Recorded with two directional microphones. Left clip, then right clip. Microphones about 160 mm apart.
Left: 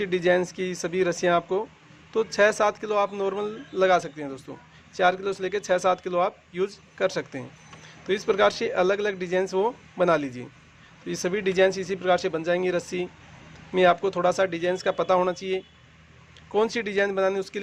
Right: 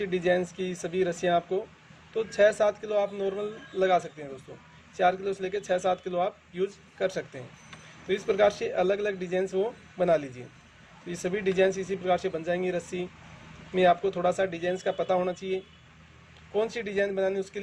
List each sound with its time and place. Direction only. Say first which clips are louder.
0.0 s speech: left 4 dB; 35° left (ahead or behind)